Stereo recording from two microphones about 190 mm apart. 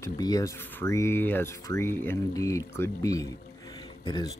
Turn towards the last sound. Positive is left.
turn(degrees=20)  # may be behind; listen again after turning